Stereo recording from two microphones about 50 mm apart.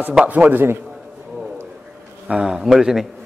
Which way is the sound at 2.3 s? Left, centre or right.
Centre.